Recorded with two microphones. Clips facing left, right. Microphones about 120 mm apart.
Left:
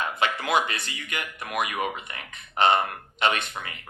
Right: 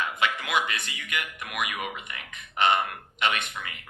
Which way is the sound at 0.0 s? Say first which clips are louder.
Left 2 dB; 35° left (ahead or behind).